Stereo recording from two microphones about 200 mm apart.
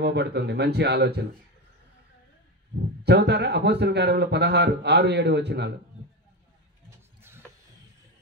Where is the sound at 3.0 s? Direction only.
55° right (ahead or behind).